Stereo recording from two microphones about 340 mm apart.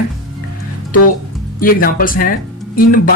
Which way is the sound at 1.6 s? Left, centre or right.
Left.